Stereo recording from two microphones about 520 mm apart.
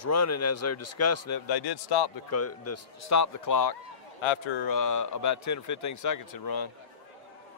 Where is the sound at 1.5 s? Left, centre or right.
Left.